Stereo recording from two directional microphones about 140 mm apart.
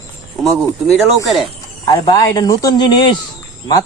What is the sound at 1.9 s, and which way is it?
Speech, 25° left (ahead or behind).